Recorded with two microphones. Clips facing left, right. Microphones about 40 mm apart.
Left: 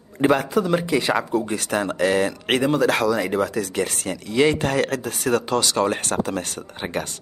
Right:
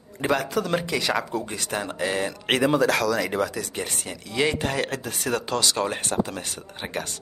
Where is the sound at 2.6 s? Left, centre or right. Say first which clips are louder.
Even; centre.